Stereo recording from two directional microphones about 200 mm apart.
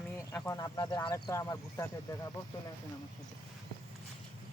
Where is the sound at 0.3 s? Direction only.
15° left (ahead or behind).